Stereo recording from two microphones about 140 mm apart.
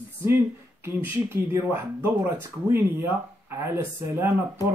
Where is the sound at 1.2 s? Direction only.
15° right (ahead or behind).